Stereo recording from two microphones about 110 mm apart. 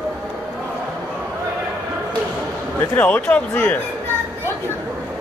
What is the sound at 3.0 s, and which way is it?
Speech, 15° left (ahead or behind).